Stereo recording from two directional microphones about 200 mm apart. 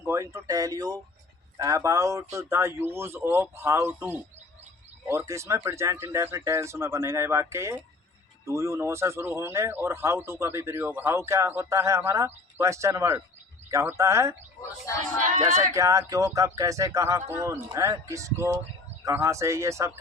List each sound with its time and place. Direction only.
0.0 s speech: 15° right (ahead or behind)
15.7 s speech: 15° right (ahead or behind)